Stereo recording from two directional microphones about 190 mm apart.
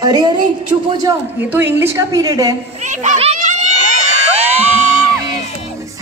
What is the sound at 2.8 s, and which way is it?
Children playing, 40° right (ahead or behind).